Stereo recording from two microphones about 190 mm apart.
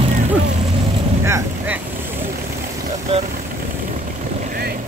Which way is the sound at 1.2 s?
15° right (ahead or behind).